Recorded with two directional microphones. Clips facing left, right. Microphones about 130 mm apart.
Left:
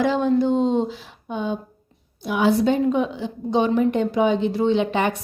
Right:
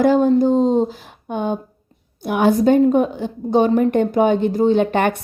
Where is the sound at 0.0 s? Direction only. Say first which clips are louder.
Right 5 dB; 45° right (ahead or behind).